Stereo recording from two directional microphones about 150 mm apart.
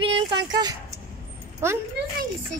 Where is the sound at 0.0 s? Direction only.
35° right (ahead or behind).